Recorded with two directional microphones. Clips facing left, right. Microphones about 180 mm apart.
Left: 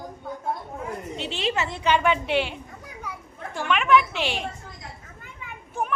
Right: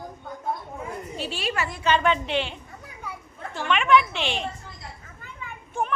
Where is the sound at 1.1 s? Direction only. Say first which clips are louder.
Left 2 dB; 20° left (ahead or behind).